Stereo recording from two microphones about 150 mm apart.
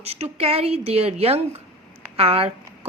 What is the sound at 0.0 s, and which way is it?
A woman's voice, 40° right (ahead or behind).